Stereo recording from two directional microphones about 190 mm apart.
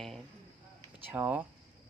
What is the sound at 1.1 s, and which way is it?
Speech, 10° right (ahead or behind).